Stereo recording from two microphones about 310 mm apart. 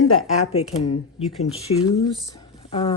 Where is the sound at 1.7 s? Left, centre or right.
Left.